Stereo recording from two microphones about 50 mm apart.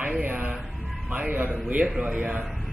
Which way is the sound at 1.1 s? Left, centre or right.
Right.